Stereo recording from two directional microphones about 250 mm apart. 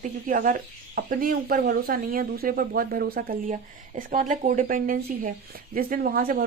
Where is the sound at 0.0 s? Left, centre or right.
Right.